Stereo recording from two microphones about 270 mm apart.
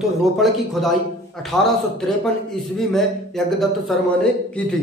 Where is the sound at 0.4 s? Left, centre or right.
Centre.